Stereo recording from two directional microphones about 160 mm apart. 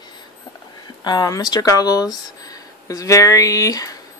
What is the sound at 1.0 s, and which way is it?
Speech, 25° left (ahead or behind).